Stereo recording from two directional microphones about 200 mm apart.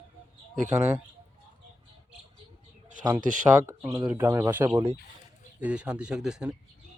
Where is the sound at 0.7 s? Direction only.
5° right (ahead or behind).